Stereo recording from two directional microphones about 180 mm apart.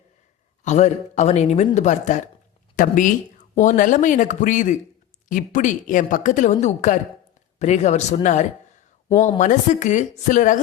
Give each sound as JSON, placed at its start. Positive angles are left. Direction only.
{"t": 0.6, "sound": "a woman's voice", "side_deg": 40}